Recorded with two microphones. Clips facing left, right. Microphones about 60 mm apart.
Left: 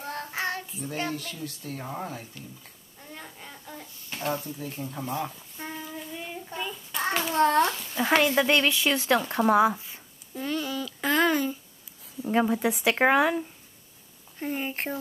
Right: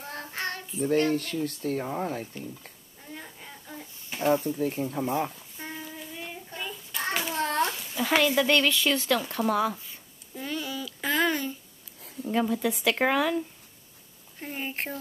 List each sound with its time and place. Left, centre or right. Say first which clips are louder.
0.0 s child singing: left 3 dB; centre
1.1 s speech: right 7 dB; right
3.1 s babbling: even; centre
4.6 s speech: right 7 dB; right
5.6 s child singing: left 2 dB; centre
8.4 s speech: even; centre
9.3 s speech: left 5 dB; left
10.3 s a sound: left 3 dB; centre
12.3 s speech: left 2 dB; left
14.4 s speech: left 3 dB; centre